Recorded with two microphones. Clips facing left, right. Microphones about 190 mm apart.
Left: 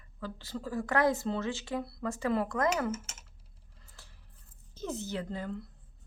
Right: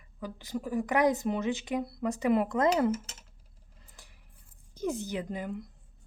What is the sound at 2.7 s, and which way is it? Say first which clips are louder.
Speech: right 5 dB; 35° right (ahead or behind).